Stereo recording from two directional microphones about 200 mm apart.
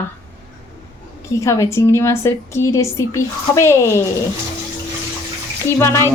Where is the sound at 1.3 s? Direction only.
15° left (ahead or behind).